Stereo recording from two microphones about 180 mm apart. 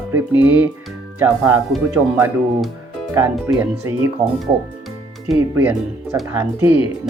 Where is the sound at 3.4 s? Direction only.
15° right (ahead or behind).